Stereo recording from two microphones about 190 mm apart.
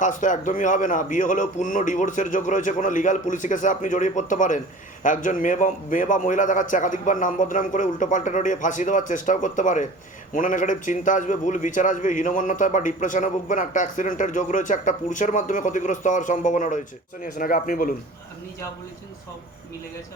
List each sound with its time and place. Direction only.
0.0 s a man's voice: 40° left (ahead or behind)